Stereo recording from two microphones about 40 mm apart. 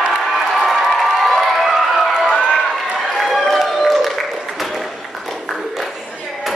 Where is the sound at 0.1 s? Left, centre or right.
Centre.